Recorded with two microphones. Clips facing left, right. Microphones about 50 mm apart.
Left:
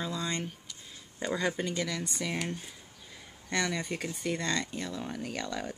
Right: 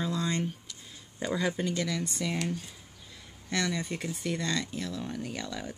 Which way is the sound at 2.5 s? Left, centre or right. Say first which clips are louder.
Right 3 dB; centre.